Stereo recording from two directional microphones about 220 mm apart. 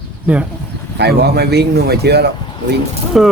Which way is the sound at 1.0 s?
50° right (ahead or behind).